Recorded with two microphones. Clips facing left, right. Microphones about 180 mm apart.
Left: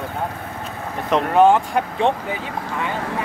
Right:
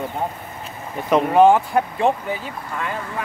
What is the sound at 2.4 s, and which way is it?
Speech, 85° left.